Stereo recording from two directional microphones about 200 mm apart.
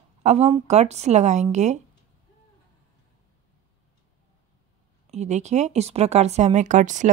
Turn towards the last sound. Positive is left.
turn(degrees=-40)  # may be behind; listen again after turning